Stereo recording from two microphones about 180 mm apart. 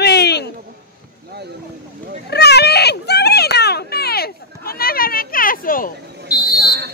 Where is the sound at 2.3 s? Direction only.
65° left (ahead or behind); by 6.3 s 50° left (ahead or behind).